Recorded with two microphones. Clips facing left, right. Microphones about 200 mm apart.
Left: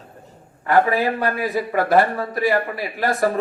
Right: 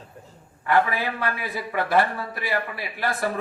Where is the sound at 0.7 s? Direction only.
45° left (ahead or behind).